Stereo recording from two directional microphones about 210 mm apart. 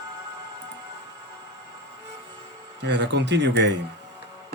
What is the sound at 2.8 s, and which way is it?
Speech, 55° right (ahead or behind).